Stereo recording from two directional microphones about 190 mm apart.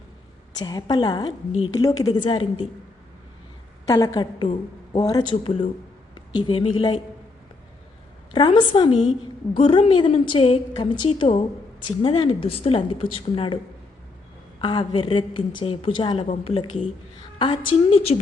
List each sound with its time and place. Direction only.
0.6 s a woman's voice: 20° left (ahead or behind)
3.8 s a woman's voice: 20° left (ahead or behind)
8.3 s a woman's voice: 25° left (ahead or behind)
14.6 s a woman's voice: 25° left (ahead or behind)
16.2 s a woman's voice: 40° left (ahead or behind)
17.3 s a woman's voice: 25° left (ahead or behind)